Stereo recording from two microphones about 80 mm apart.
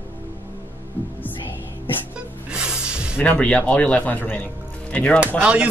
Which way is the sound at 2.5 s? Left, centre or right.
Centre.